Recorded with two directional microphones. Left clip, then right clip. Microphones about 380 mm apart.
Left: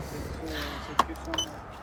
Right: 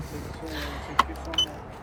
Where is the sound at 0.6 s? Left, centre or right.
Centre.